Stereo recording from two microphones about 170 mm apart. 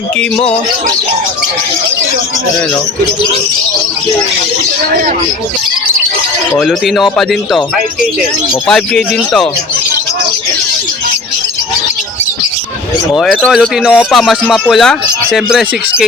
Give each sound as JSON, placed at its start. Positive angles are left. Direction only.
{"t": 0.2, "sound": "speech", "side_deg": 5}
{"t": 6.5, "sound": "speech", "side_deg": 5}
{"t": 8.6, "sound": "speech", "side_deg": 5}
{"t": 13.1, "sound": "speech", "side_deg": 0}